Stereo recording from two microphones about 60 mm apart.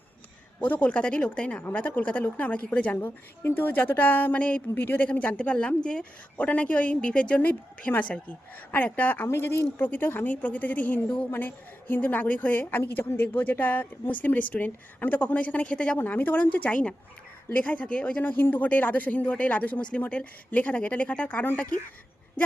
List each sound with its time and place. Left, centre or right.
0.6 s speech: left
1.6 s a woman's voice: left
4.7 s a woman's voice: left
5.0 s a woman's voice: left
16.0 s speech: left
18.2 s a woman's voice: left